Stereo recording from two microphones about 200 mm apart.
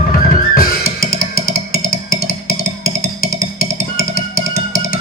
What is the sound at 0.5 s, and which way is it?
Music, 45° left (ahead or behind).